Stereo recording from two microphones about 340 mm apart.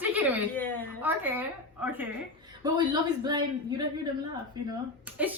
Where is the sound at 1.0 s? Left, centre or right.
Centre.